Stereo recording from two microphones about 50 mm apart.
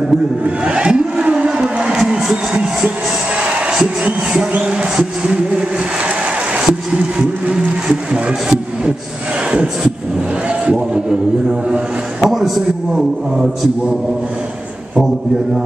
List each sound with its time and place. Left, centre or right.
0.7 s a sound: centre
3.3 s a man's voice: right
5.3 s a sound: right
6.5 s speech: centre
10.6 s a man's voice: centre
12.3 s a man's voice: centre